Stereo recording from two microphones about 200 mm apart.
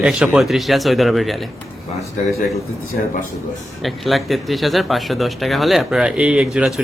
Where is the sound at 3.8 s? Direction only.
Centre (ahead or behind).